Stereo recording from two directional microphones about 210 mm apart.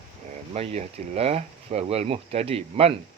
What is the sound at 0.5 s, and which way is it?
Speech, 30° right (ahead or behind).